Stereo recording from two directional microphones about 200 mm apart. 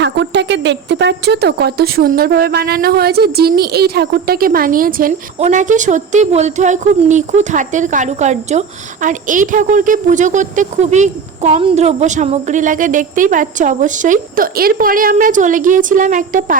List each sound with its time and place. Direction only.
0.0 s speech: 60° right (ahead or behind); by 16.6 s 40° right (ahead or behind)